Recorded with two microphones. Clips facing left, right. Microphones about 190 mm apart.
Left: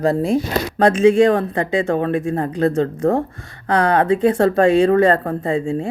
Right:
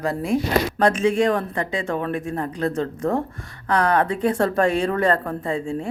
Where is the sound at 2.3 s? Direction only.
40° left (ahead or behind).